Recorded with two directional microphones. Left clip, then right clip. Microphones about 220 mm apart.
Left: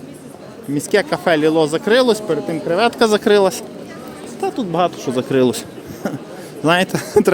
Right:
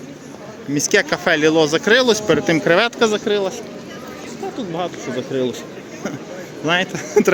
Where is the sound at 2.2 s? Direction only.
15° right (ahead or behind).